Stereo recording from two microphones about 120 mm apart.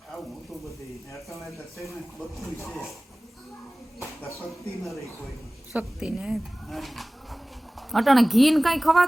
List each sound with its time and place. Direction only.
1.1 s a woman's voice: centre (ahead or behind)
4.0 s a sound: 25° left (ahead or behind)
5.7 s a woman's voice: 5° right (ahead or behind)